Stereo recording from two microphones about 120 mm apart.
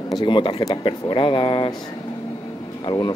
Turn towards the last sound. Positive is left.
turn(degrees=45)  # may be behind; listen again after turning